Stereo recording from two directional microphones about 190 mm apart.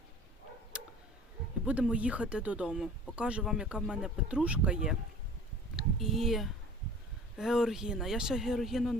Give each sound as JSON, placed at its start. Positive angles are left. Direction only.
{"t": 1.6, "sound": "speech", "side_deg": -5}
{"t": 5.7, "sound": "a sound", "side_deg": 0}
{"t": 7.3, "sound": "speech", "side_deg": -5}